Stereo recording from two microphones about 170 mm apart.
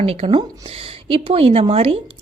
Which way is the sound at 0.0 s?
35° right (ahead or behind).